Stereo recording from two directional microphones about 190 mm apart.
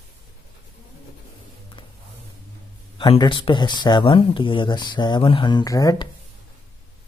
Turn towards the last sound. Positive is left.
turn(degrees=20)  # may be behind; listen again after turning